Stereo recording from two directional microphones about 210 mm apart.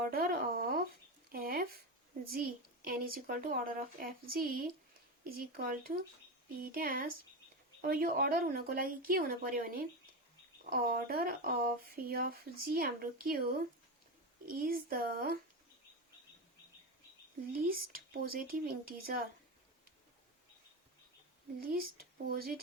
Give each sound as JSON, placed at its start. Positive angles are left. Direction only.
{"t": 0.0, "sound": "speech", "side_deg": -45}
{"t": 17.5, "sound": "speech", "side_deg": -45}
{"t": 22.3, "sound": "speech", "side_deg": -45}